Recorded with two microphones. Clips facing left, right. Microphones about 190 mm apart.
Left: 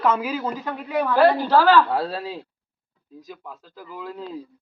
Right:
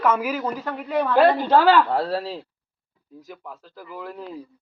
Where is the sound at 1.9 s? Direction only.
15° left (ahead or behind).